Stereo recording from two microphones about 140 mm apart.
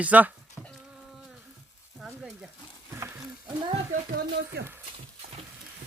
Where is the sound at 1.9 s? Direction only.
5° right (ahead or behind).